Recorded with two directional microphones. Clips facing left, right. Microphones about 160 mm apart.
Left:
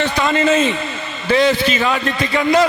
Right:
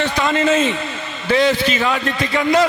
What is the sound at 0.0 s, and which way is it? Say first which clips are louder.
A man's voice: left 1 dB; 10° left (ahead or behind).